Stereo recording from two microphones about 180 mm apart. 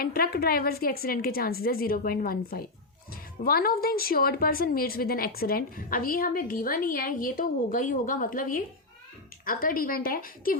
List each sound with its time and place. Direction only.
0.0 s a woman's voice: 55° left (ahead or behind)